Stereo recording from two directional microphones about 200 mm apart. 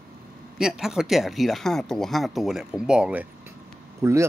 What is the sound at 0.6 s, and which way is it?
Speech, centre (ahead or behind).